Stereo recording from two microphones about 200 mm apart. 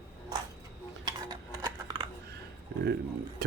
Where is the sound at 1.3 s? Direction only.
20° right (ahead or behind).